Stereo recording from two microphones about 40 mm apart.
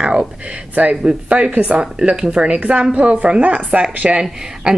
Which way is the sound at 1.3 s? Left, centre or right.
Right.